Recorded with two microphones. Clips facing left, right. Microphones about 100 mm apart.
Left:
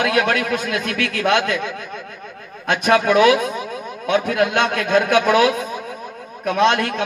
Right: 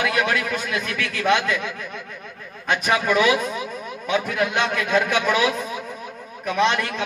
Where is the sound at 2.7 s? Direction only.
60° left (ahead or behind).